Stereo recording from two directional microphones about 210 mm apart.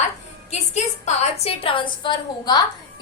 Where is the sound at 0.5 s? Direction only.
35° left (ahead or behind).